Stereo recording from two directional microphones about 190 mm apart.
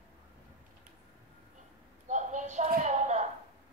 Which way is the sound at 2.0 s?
40° right (ahead or behind).